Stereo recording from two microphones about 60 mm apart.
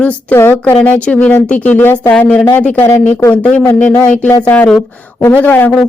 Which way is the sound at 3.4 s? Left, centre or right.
Left.